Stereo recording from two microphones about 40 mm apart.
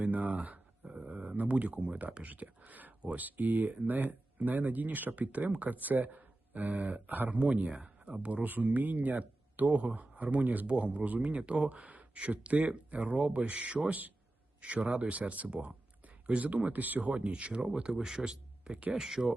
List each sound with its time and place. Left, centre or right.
0.1 s speech: right
1.0 s a sound: right
1.4 s speech: right
2.2 s speech: right
7.3 s speech: right
8.4 s speech: right
9.7 s speech: right
10.7 s speech: right
16.7 s speech: right
17.4 s a man's voice: right
18.6 s speech: right
18.9 s a man's voice: centre